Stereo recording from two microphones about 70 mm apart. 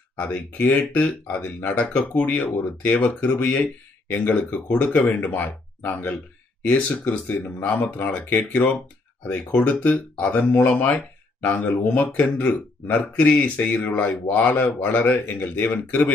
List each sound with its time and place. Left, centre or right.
0.2 s speech: left